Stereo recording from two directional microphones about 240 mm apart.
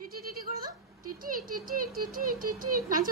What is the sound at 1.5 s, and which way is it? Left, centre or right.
A woman's voice, right.